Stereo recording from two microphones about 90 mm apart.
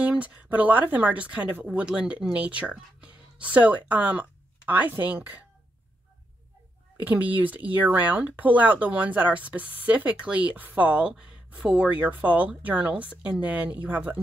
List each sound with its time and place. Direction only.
0.0 s speech: 15° right (ahead or behind)
7.0 s speech: 20° right (ahead or behind)